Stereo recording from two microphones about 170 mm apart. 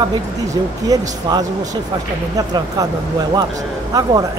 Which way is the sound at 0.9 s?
20° right (ahead or behind).